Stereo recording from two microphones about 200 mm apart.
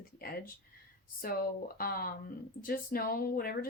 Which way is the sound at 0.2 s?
50° left (ahead or behind).